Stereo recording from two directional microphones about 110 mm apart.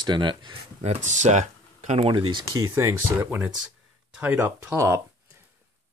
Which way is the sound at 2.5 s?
30° right (ahead or behind).